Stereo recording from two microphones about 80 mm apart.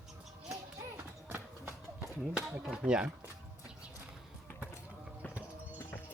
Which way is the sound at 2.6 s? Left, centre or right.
Centre.